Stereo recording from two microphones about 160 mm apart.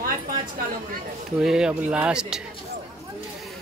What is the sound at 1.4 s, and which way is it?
Speech, 5° right (ahead or behind).